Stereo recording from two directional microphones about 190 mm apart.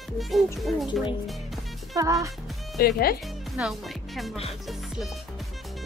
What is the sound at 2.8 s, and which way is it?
Speech, 55° left (ahead or behind).